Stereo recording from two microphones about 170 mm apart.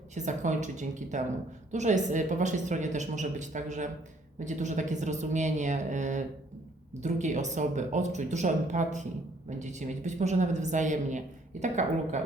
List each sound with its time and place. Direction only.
0.1 s a woman's voice: 45° right (ahead or behind)